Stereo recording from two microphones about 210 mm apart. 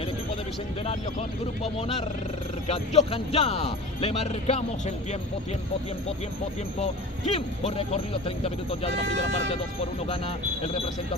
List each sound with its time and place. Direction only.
1.6 s speech: 30° left (ahead or behind)
6.8 s speech: 30° left (ahead or behind)
10.0 s speech: 25° left (ahead or behind)